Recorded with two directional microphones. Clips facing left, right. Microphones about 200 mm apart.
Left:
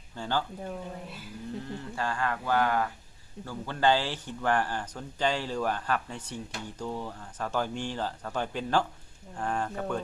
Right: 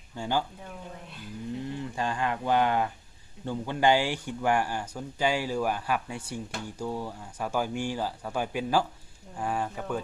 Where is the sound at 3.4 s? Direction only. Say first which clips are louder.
Right 2 dB; 20° right (ahead or behind).